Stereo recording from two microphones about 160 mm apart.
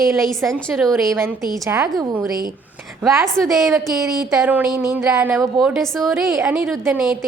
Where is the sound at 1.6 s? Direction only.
20° right (ahead or behind).